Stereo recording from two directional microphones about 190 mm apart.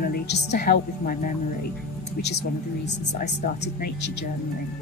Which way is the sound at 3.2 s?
50° left (ahead or behind).